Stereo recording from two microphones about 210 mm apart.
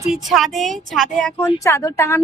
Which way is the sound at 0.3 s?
Centre (ahead or behind).